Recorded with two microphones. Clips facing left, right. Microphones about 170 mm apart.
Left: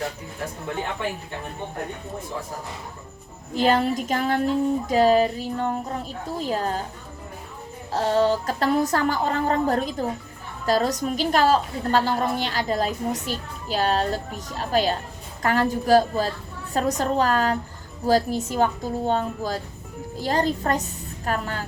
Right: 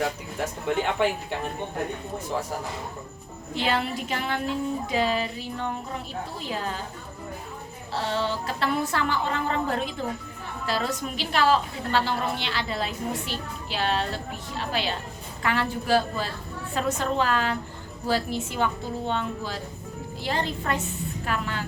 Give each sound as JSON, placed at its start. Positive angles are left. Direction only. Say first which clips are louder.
{"t": 1.0, "sound": "speech", "louder": "right 7 dB", "side_deg": -85}
{"t": 3.5, "sound": "a woman's voice", "louder": "left 6 dB", "side_deg": 40}
{"t": 7.9, "sound": "a woman's voice", "louder": "left 7 dB", "side_deg": 45}